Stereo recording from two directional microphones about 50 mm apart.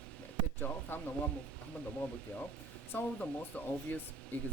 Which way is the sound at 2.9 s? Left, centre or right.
Left.